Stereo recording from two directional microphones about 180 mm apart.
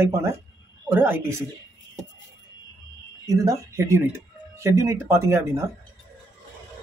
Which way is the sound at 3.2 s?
15° right (ahead or behind).